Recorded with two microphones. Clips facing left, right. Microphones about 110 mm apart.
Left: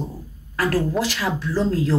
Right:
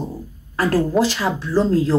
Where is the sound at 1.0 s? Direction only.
30° right (ahead or behind).